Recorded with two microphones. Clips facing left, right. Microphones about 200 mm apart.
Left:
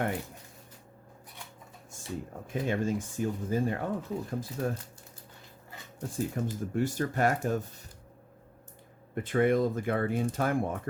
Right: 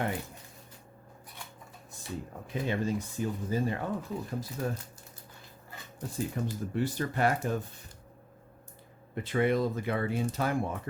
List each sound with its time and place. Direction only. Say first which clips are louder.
2.5 s speech: left 1 dB; 50° left (ahead or behind)
6.0 s speech: left 1 dB; 45° left (ahead or behind)
9.1 s speech: left 2 dB; 50° left (ahead or behind)